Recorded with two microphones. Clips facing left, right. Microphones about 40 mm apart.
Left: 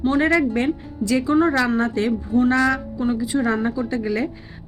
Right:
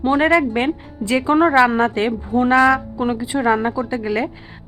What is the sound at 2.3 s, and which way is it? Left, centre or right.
A woman's voice, right.